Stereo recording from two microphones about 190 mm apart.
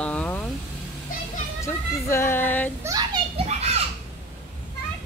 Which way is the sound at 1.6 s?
15° left (ahead or behind).